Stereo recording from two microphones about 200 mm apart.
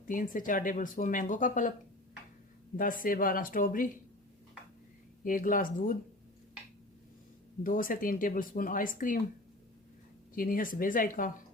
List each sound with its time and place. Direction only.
0.1 s speech: 45° left (ahead or behind)
2.7 s speech: 45° left (ahead or behind)
5.2 s speech: 45° left (ahead or behind)
7.6 s speech: 45° left (ahead or behind)
10.3 s speech: 45° left (ahead or behind)